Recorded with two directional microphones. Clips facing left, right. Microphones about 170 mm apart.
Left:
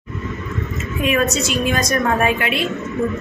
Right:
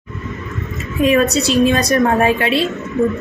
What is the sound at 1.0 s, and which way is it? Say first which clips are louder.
A woman's voice: right 5 dB; 35° right (ahead or behind).